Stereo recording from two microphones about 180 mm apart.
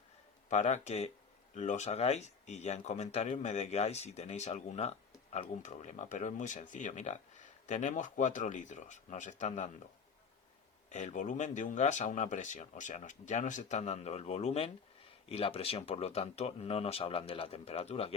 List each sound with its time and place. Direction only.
0.5 s speech: 40° left (ahead or behind)
10.8 s speech: 40° left (ahead or behind)